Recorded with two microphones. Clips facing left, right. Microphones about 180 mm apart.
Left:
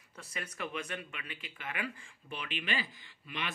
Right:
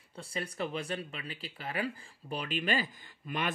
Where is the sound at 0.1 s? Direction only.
30° right (ahead or behind).